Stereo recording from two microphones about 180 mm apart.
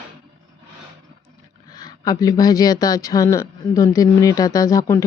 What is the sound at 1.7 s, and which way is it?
Speech, 20° left (ahead or behind).